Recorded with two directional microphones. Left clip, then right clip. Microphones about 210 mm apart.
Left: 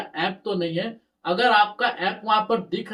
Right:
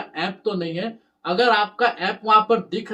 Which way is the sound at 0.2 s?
15° right (ahead or behind).